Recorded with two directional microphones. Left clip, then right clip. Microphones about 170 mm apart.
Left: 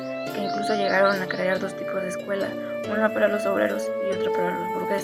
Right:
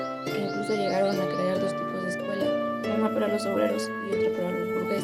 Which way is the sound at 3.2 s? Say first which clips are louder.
Left 5 dB; 40° right (ahead or behind).